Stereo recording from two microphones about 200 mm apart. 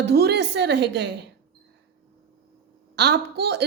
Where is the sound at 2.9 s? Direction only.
55° right (ahead or behind).